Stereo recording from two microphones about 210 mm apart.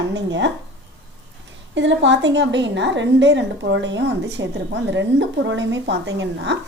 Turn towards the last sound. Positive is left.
turn(degrees=-55)  # may be behind; listen again after turning